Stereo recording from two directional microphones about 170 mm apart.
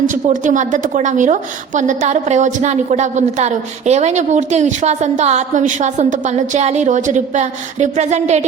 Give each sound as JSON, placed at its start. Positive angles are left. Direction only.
{"t": 0.1, "sound": "a woman's voice", "side_deg": -50}